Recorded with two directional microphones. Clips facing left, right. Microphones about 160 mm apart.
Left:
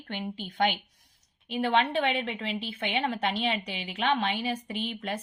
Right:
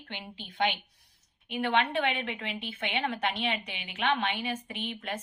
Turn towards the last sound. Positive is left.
turn(degrees=35)  # may be behind; listen again after turning